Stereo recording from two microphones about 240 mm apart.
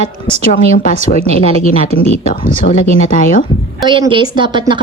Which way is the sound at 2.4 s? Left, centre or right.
Left.